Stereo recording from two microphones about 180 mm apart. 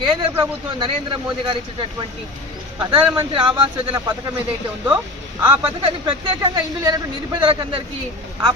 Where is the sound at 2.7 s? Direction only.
25° right (ahead or behind).